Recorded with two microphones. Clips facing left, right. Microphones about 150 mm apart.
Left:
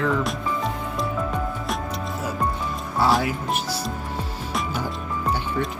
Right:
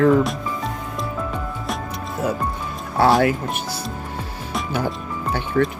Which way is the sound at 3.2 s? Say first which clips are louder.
Right 5 dB; 55° right (ahead or behind).